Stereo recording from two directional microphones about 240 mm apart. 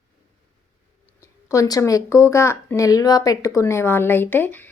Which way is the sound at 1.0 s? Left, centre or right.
Centre.